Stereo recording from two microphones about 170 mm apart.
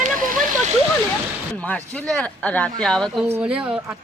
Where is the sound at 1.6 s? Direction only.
5° left (ahead or behind).